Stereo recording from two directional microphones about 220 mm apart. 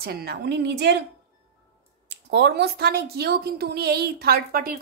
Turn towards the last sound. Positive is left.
turn(degrees=-40)  # may be behind; listen again after turning